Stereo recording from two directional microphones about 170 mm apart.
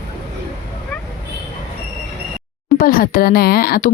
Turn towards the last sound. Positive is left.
turn(degrees=60)  # may be behind; listen again after turning